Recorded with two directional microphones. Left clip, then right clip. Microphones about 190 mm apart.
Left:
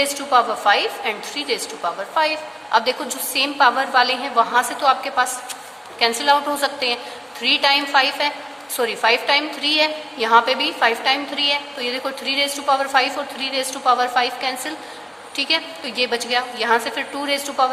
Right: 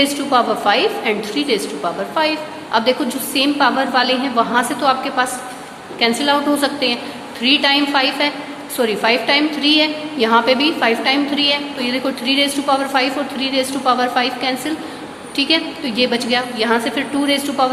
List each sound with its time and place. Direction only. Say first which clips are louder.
0.0 s a woman's voice: right 2 dB; 25° left (ahead or behind)